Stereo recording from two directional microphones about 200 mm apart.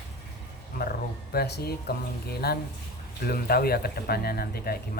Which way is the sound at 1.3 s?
50° left (ahead or behind).